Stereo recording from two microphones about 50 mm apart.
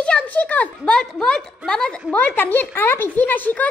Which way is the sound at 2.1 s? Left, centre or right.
Left.